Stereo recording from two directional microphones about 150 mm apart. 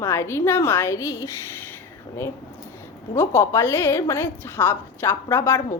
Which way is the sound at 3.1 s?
20° left (ahead or behind).